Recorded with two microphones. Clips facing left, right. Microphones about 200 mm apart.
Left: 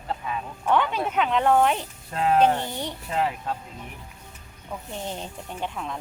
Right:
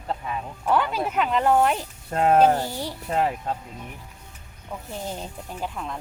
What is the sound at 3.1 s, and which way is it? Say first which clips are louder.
Speech: right 3 dB; 40° right (ahead or behind).